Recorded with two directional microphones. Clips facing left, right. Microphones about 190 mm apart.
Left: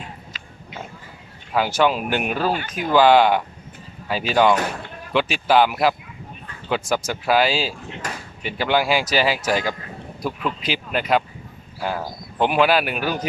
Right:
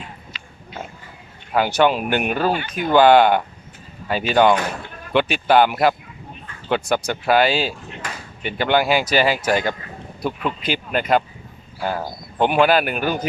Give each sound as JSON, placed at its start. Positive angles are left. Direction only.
{"t": 1.5, "sound": "speech", "side_deg": 0}